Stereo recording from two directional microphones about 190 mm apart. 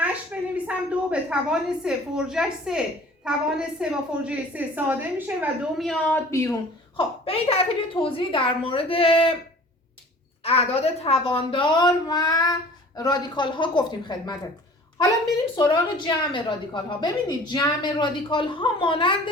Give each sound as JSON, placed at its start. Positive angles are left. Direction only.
{"t": 0.0, "sound": "a woman's voice", "side_deg": -5}
{"t": 6.9, "sound": "a woman's voice", "side_deg": 30}
{"t": 10.4, "sound": "a woman's voice", "side_deg": 35}
{"t": 15.5, "sound": "a woman's voice", "side_deg": 25}